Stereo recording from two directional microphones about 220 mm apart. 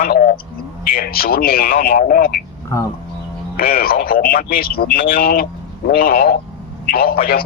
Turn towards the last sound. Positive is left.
turn(degrees=40)  # may be behind; listen again after turning